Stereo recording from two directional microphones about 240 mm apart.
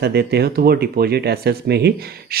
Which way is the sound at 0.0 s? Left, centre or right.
Right.